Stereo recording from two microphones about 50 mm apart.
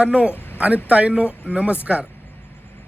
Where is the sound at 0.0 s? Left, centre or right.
Right.